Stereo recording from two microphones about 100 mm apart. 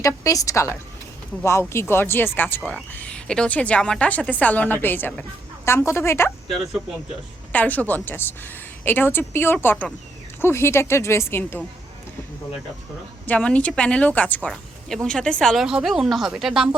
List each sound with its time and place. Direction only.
0.0 s a woman's voice: 35° left (ahead or behind)
7.5 s a woman's voice: 15° left (ahead or behind)
13.2 s a woman's voice: 15° left (ahead or behind)
14.4 s speech: centre (ahead or behind)
15.6 s speech: 5° right (ahead or behind)